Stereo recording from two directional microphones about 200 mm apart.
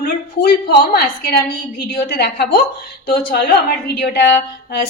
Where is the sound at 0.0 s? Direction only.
45° left (ahead or behind).